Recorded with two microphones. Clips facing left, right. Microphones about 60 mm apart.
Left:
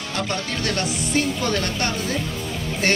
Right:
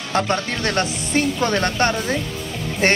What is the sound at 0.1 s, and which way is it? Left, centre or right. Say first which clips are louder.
Speech: right 6 dB; right.